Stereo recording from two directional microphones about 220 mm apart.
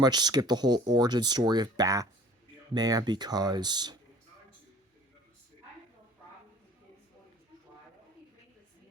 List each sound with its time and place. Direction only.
0.0 s speech: 20° right (ahead or behind)